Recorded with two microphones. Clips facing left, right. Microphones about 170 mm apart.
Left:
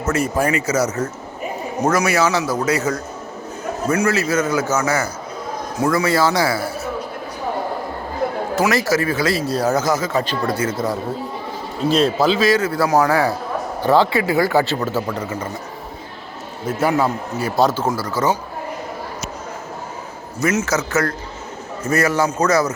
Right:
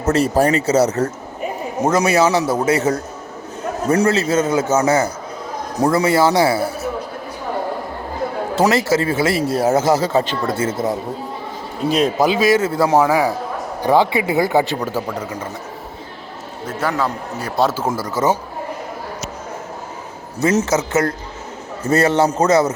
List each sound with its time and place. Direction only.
0.0 s speech: 35° right (ahead or behind)
1.8 s speech: 25° right (ahead or behind)
8.5 s a man's voice: 25° right (ahead or behind); by 15.2 s 10° right (ahead or behind)
16.6 s a man's voice: 10° left (ahead or behind)
17.9 s speech: 20° right (ahead or behind)
20.4 s speech: 35° right (ahead or behind)
20.7 s speech: 25° right (ahead or behind)